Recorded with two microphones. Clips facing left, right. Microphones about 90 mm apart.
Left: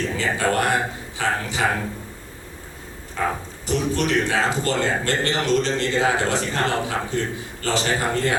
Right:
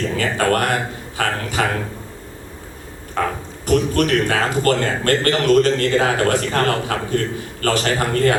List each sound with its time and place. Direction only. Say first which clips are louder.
0.2 s speech: right 3 dB; 60° right (ahead or behind)
3.2 s a sound: right 3 dB; 60° right (ahead or behind)
3.7 s speech: right 5 dB; 55° right (ahead or behind)